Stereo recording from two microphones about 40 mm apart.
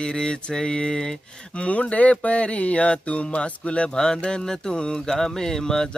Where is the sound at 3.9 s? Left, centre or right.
Centre.